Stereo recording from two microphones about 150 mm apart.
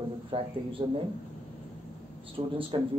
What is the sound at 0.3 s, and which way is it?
Speech, 35° right (ahead or behind).